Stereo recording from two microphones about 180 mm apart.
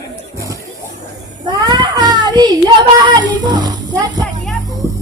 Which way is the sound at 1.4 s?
25° right (ahead or behind).